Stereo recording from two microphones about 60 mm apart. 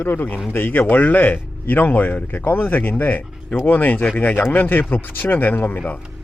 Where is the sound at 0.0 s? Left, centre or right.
Left.